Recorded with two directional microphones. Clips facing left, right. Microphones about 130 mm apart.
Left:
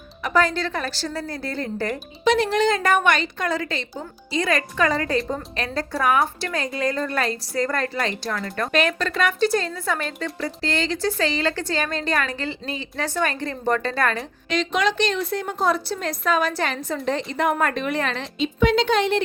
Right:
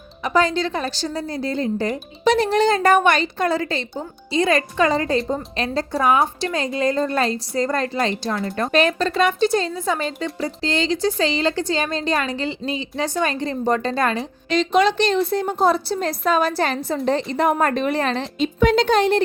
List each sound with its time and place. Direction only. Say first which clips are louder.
0.2 s a woman's voice: right 2 dB; 20° right (ahead or behind)
2.2 s a woman's voice: right 2 dB; 35° right (ahead or behind); by 14.3 s 20° right (ahead or behind)
14.5 s a woman's voice: right 5 dB; 30° right (ahead or behind)
18.3 s speech: right 2 dB; 45° right (ahead or behind)